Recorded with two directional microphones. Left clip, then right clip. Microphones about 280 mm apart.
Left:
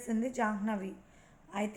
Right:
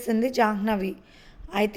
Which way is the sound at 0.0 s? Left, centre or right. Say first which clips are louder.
Right 11 dB; right.